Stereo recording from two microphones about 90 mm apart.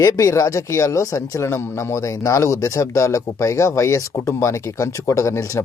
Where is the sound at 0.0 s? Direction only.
35° left (ahead or behind).